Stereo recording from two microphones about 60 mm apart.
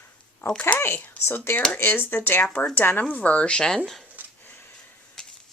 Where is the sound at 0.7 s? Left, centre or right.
Left.